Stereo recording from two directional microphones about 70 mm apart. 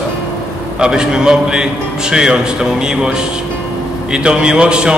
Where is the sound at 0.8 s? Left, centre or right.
Centre.